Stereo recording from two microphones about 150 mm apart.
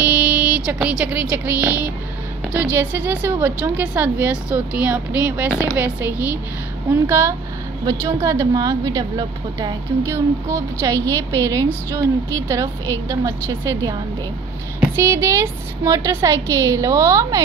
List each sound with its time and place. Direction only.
0.0 s a woman's voice: 10° right (ahead or behind)